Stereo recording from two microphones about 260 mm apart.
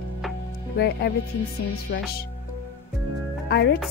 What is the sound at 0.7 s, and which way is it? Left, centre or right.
Speech, left.